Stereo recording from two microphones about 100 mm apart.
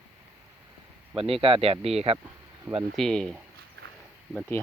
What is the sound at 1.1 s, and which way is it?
Speech, 65° right (ahead or behind).